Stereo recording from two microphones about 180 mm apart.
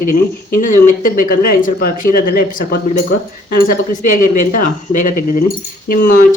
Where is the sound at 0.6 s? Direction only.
45° left (ahead or behind).